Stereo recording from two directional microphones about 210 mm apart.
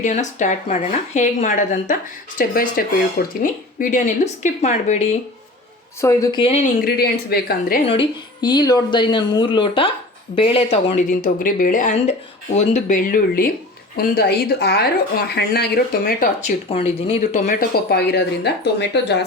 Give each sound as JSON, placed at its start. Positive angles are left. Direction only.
{"t": 0.0, "sound": "speech", "side_deg": 35}
{"t": 6.0, "sound": "speech", "side_deg": 15}
{"t": 6.8, "sound": "speech", "side_deg": 45}
{"t": 7.9, "sound": "speech", "side_deg": 25}
{"t": 16.6, "sound": "speech", "side_deg": 25}